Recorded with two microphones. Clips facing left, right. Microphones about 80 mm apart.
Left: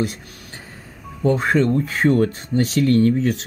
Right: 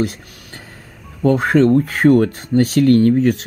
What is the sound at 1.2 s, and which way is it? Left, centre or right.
Speech, right.